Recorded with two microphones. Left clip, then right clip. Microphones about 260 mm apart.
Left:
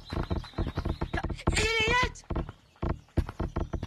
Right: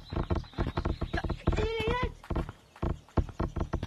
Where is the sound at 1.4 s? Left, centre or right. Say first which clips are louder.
Left 6 dB; left.